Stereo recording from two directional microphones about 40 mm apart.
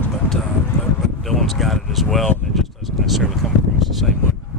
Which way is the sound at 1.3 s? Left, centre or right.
Centre.